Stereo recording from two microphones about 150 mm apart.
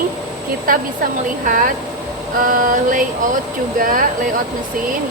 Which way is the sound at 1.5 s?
65° right (ahead or behind).